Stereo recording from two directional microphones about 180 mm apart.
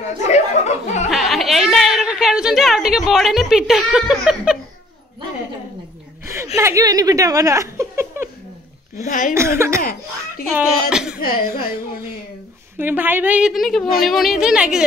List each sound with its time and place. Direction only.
0.0 s chuckle: 40° left (ahead or behind)
1.1 s a sound: centre (ahead or behind)
3.1 s speech: centre (ahead or behind)
6.2 s speech: 15° right (ahead or behind)
9.0 s speech: 45° left (ahead or behind)
9.3 s a woman's voice: 15° right (ahead or behind)
9.8 s speech: 50° left (ahead or behind)
10.5 s speech: 5° right (ahead or behind)
11.1 s speech: 55° left (ahead or behind)
12.7 s a woman's voice: 10° right (ahead or behind)